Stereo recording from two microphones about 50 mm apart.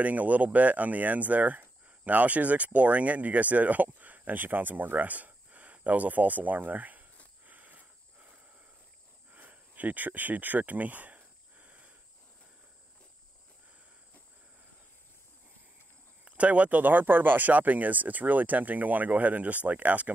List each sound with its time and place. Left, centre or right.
0.0 s speech: right
7.4 s cricket: right
9.3 s a sound: right
16.3 s speech: right